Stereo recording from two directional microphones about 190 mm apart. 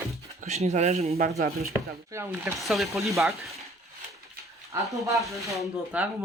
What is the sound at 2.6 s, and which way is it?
Speech, centre (ahead or behind).